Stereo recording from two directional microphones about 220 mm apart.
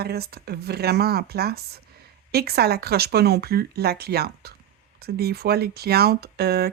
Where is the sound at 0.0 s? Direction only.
45° right (ahead or behind).